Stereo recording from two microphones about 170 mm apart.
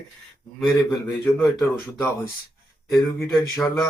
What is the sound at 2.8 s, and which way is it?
Speech, centre (ahead or behind).